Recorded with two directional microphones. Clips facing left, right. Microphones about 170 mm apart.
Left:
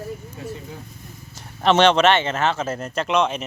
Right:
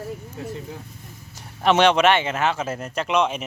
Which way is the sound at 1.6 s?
10° right (ahead or behind).